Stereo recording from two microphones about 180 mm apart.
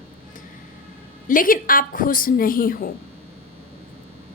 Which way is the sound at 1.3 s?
50° left (ahead or behind).